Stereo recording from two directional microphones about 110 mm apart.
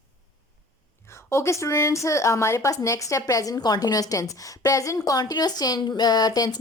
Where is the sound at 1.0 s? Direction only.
25° left (ahead or behind).